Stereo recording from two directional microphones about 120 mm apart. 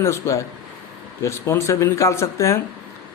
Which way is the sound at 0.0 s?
25° left (ahead or behind).